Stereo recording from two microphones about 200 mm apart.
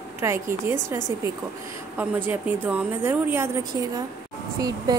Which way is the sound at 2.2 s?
5° right (ahead or behind).